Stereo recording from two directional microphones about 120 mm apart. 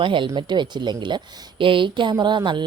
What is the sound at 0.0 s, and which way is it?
A woman's voice, 45° right (ahead or behind).